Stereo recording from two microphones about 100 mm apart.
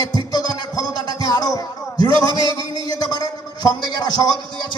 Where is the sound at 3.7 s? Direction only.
45° left (ahead or behind).